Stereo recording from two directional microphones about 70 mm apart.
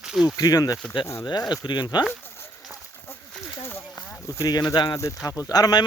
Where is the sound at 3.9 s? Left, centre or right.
Left.